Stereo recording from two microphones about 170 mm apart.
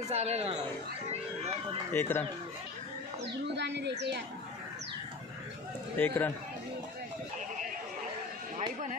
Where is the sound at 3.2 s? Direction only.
90° right.